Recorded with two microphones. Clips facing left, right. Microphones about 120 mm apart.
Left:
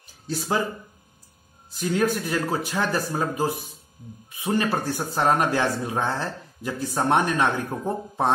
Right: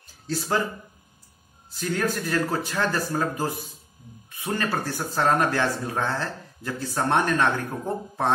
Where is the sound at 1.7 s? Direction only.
15° left (ahead or behind).